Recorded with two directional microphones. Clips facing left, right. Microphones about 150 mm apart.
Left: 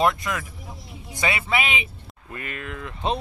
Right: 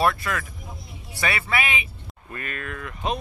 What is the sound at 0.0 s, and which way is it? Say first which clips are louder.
Speech: left 1 dB; 20° left (ahead or behind).